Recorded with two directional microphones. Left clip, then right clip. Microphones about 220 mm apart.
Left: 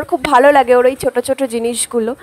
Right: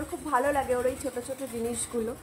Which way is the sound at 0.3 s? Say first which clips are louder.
Left 17 dB; 50° left (ahead or behind).